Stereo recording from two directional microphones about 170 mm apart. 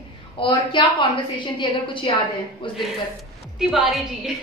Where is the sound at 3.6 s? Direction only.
Centre (ahead or behind).